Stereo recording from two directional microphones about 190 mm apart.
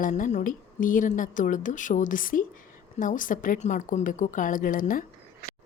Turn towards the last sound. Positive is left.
turn(degrees=45)  # may be behind; listen again after turning